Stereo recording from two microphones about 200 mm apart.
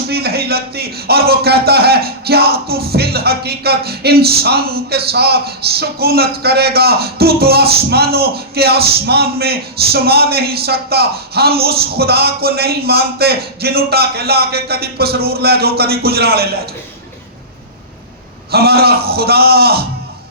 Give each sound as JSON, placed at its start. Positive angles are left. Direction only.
{"t": 0.1, "sound": "speech", "side_deg": -50}
{"t": 18.5, "sound": "speech", "side_deg": -50}